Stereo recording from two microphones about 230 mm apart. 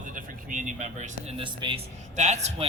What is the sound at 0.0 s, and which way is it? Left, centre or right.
A man's voice, right.